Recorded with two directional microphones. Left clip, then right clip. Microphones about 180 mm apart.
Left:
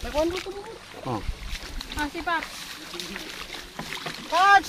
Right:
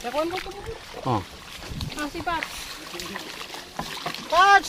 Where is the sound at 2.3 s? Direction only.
Centre (ahead or behind).